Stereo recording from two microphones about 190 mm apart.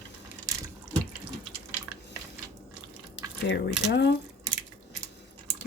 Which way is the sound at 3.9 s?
65° left (ahead or behind).